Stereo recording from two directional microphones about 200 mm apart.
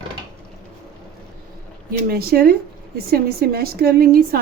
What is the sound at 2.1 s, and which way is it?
A woman's voice, 50° right (ahead or behind).